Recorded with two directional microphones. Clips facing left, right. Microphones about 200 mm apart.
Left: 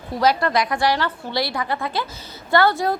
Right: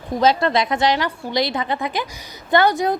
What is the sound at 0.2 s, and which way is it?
A woman's voice, 25° right (ahead or behind).